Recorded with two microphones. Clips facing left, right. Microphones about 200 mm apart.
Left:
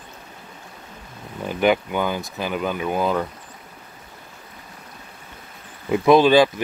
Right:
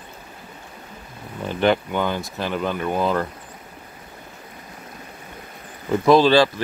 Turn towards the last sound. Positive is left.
turn(degrees=15)  # may be behind; listen again after turning